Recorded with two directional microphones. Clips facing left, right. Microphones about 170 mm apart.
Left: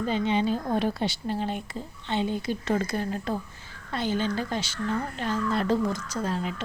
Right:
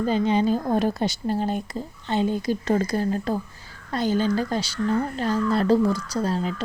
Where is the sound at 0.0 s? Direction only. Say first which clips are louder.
Right 4 dB; 40° right (ahead or behind).